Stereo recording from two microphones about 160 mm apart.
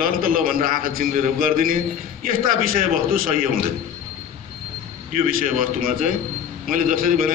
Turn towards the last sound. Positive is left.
turn(degrees=-60)  # may be behind; listen again after turning